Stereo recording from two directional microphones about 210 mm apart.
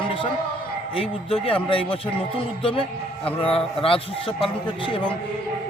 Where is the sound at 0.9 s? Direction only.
25° left (ahead or behind).